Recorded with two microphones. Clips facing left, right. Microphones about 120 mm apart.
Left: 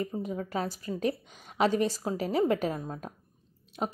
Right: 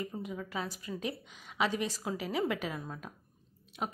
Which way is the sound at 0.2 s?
40° left (ahead or behind).